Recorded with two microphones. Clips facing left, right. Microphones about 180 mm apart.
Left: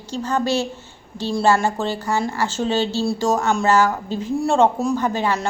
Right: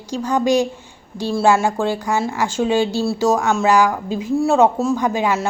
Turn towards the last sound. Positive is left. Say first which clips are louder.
# right 2 dB
turn(degrees=-10)  # may be behind; listen again after turning